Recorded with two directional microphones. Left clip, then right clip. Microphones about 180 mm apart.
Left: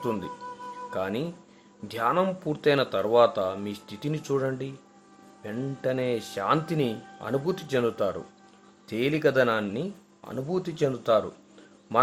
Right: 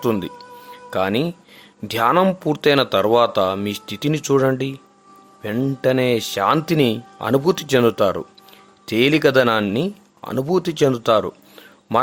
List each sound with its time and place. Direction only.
0.0 s speech: 45° right (ahead or behind)